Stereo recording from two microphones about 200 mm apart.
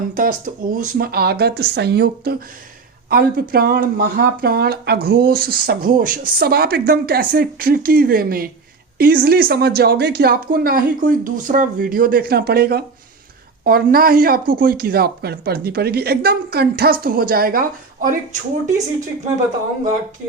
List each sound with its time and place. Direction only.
0.1 s speech: 45° right (ahead or behind)